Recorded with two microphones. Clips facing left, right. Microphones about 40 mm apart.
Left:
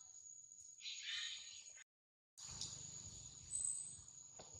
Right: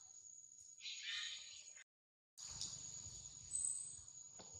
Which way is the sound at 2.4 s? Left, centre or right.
Centre.